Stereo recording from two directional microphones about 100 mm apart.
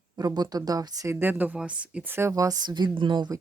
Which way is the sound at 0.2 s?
40° right (ahead or behind).